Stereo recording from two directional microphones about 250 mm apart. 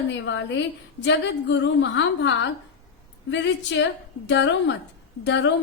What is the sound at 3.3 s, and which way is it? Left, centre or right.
A woman's voice, left.